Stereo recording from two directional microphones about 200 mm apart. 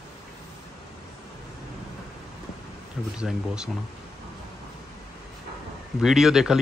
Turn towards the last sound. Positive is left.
turn(degrees=0)  # may be behind; listen again after turning